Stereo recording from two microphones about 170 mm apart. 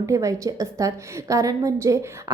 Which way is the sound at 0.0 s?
20° right (ahead or behind).